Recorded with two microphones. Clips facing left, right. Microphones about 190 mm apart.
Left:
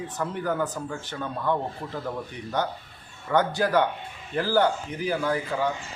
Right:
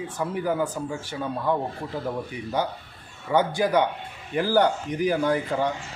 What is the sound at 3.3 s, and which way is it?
Speech, 10° right (ahead or behind).